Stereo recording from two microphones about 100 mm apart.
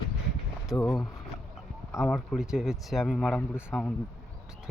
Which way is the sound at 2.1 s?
Centre (ahead or behind).